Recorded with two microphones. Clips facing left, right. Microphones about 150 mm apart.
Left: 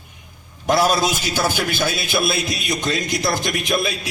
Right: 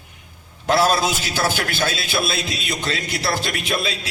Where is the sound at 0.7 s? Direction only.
15° left (ahead or behind).